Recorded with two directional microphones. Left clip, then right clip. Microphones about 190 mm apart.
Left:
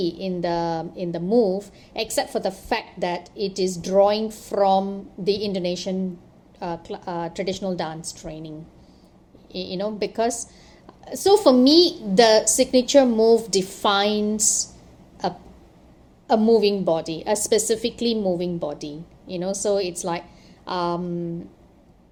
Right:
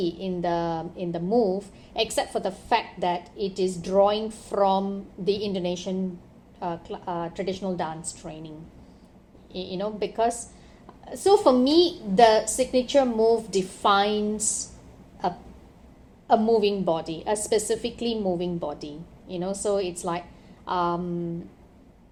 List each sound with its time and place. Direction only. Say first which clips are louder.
0.0 s a woman's voice: left 2 dB; 25° left (ahead or behind)